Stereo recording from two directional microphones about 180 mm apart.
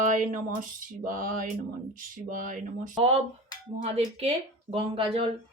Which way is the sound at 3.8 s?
35° right (ahead or behind).